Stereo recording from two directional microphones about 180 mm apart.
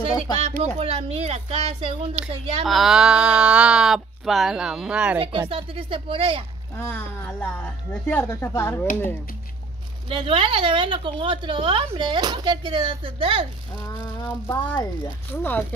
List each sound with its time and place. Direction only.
0.7 s a woman's voice: 35° right (ahead or behind)
2.6 s speech: centre (ahead or behind)
5.5 s a woman's voice: 30° right (ahead or behind)
6.8 s speech: 10° left (ahead or behind)
10.0 s a woman's voice: 30° right (ahead or behind)
13.8 s speech: 15° left (ahead or behind)